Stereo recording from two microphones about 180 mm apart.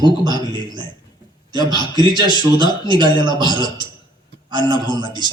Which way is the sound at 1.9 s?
25° left (ahead or behind).